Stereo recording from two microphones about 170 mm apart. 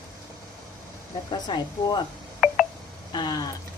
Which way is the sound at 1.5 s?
25° left (ahead or behind).